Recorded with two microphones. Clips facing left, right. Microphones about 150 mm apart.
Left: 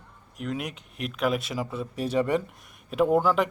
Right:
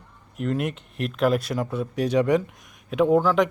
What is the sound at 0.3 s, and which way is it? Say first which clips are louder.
Speech: right 6 dB; centre (ahead or behind).